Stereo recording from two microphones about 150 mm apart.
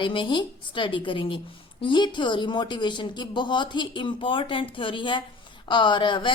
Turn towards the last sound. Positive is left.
turn(degrees=30)  # may be behind; listen again after turning